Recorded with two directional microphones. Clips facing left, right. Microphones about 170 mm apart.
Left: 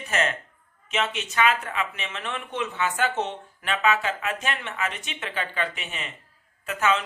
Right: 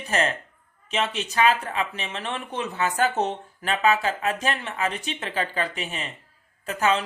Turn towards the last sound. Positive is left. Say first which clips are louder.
# right 1 dB
turn(degrees=-35)  # may be behind; listen again after turning